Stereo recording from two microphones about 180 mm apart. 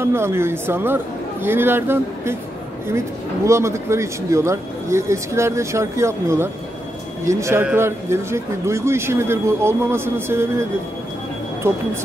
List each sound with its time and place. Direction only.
0.0 s speech: 15° right (ahead or behind)
3.4 s speech: 15° right (ahead or behind)